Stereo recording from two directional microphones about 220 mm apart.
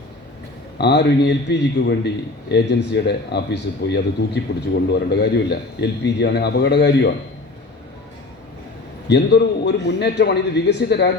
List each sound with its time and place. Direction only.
0.8 s a man's voice: 50° left (ahead or behind)
9.0 s a man's voice: 50° left (ahead or behind)